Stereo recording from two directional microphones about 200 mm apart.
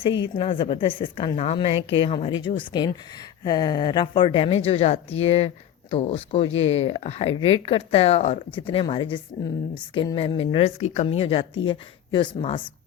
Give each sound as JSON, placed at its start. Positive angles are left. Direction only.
{"t": 0.3, "sound": "a woman's voice", "side_deg": 25}